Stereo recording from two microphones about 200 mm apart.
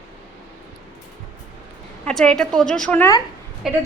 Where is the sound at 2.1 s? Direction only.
5° left (ahead or behind).